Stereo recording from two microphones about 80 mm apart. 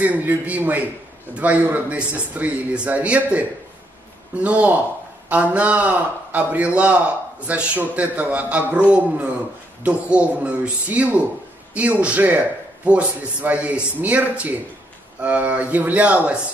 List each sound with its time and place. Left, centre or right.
0.0 s a man's voice: right